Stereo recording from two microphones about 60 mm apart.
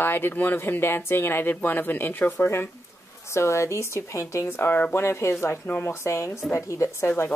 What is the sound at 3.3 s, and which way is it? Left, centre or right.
Speech, left.